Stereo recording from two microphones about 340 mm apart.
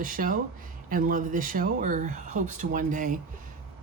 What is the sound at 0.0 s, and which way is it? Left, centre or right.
Speech, right.